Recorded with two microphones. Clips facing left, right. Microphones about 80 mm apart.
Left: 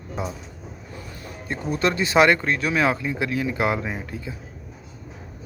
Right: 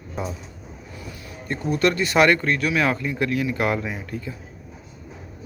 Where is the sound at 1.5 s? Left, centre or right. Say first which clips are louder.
Right 2 dB; left.